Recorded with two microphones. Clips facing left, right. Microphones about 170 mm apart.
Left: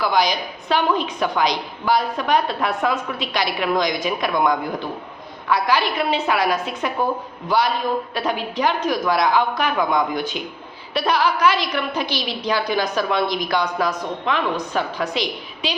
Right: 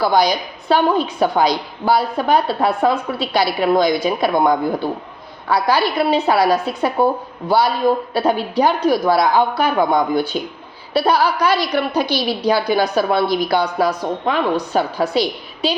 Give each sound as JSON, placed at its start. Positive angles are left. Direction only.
{"t": 0.0, "sound": "a woman's voice", "side_deg": -35}